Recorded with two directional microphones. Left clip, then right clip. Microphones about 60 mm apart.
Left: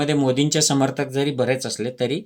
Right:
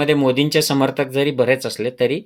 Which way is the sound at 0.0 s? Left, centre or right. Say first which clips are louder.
Right 4 dB; left.